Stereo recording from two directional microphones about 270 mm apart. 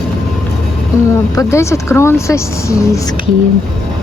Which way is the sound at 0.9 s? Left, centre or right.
Centre.